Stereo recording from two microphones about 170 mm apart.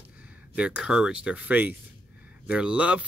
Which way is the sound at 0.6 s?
5° right (ahead or behind).